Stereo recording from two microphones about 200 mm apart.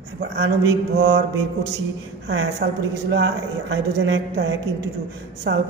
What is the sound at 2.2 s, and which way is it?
A woman's voice, 60° right (ahead or behind).